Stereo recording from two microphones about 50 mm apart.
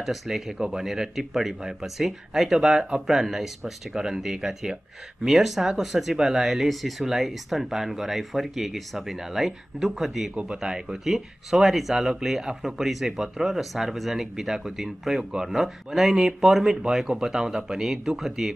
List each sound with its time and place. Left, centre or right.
0.0 s speech: centre
10.3 s speech: right
10.6 s speech: centre